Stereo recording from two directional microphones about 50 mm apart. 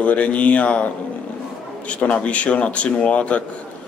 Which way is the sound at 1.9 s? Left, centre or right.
Left.